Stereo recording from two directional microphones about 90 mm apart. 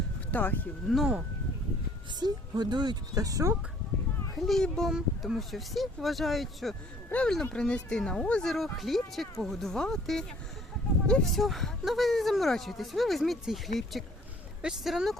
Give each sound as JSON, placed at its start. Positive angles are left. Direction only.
{"t": 0.3, "sound": "speech", "side_deg": 20}
{"t": 2.1, "sound": "speech", "side_deg": -50}
{"t": 4.4, "sound": "speech", "side_deg": 5}
{"t": 4.9, "sound": "speech", "side_deg": -5}
{"t": 7.1, "sound": "speech", "side_deg": 15}